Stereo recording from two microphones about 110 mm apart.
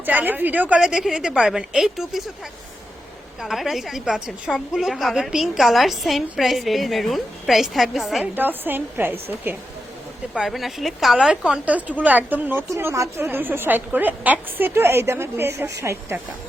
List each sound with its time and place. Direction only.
0.0 s a woman's voice: 15° right (ahead or behind)
3.4 s a woman's voice: centre (ahead or behind)
8.2 s a woman's voice: 15° right (ahead or behind)
10.3 s a woman's voice: centre (ahead or behind)
12.7 s a woman's voice: 25° right (ahead or behind)